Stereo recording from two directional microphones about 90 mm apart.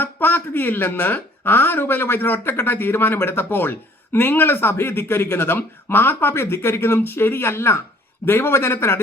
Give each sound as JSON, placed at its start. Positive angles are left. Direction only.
{"t": 0.0, "sound": "speech", "side_deg": 20}